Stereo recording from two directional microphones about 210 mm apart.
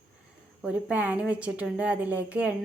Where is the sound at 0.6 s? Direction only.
5° right (ahead or behind).